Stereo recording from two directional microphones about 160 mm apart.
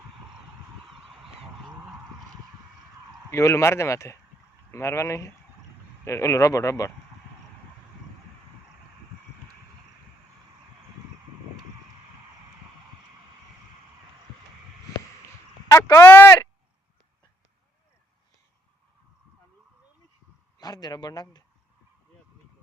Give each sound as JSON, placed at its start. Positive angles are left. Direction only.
{"t": 3.3, "sound": "speech", "side_deg": 20}
{"t": 15.7, "sound": "a sound", "side_deg": 20}
{"t": 20.6, "sound": "speech", "side_deg": 25}